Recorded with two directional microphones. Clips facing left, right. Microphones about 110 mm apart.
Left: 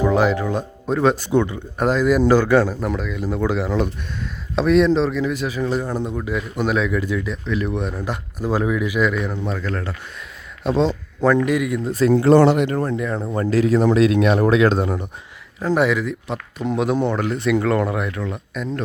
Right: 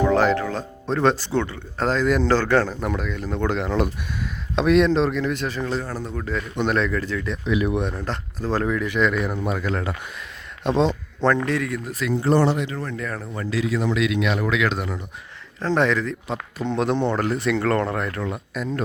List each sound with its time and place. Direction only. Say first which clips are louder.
0.0 s speech: left 1 dB; 10° left (ahead or behind)
7.4 s speech: right 5 dB; 5° right (ahead or behind)
7.9 s speech: left 2 dB; 10° left (ahead or behind); by 9.9 s 10° right (ahead or behind)
10.6 s speech: left 1 dB; centre (ahead or behind)
11.9 s speech: left 9 dB; 30° left (ahead or behind)
12.1 s speech: left 6 dB; 90° left
12.6 s speech: left 8 dB; 45° left (ahead or behind)
13.0 s speech: left 6 dB; 20° left (ahead or behind)
13.2 s speech: left 8 dB; 40° left (ahead or behind)
15.6 s speech: left 2 dB; 10° left (ahead or behind)